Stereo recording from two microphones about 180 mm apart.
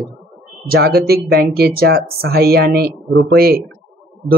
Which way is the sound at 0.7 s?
60° right (ahead or behind).